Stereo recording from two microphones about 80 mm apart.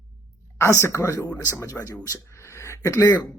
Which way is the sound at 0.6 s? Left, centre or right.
Left.